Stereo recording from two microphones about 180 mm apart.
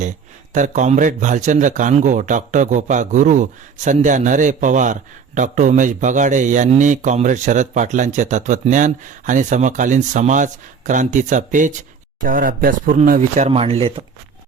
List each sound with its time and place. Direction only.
0.5 s a man's voice: 45° right (ahead or behind)